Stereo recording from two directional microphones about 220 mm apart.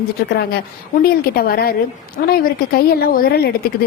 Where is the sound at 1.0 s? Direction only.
45° left (ahead or behind).